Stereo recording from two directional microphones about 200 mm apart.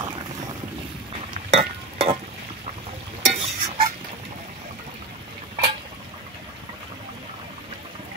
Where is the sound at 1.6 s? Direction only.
30° right (ahead or behind).